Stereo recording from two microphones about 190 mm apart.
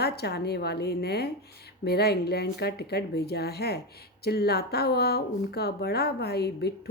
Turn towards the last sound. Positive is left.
turn(degrees=60)  # may be behind; listen again after turning